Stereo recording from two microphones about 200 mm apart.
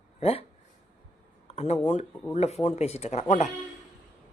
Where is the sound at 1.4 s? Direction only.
35° left (ahead or behind).